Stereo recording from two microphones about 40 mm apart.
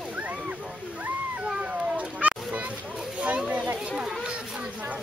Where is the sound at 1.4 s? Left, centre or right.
Right.